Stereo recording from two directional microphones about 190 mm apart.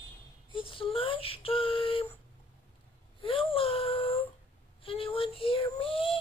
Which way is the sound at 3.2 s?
30° left (ahead or behind).